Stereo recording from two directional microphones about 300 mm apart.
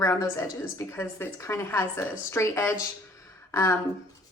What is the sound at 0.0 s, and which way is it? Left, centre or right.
A woman's voice, centre.